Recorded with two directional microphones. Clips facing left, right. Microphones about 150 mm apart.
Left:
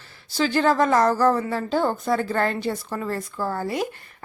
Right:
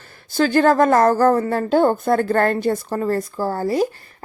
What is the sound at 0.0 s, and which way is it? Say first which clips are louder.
Speech: right 5 dB; 50° right (ahead or behind).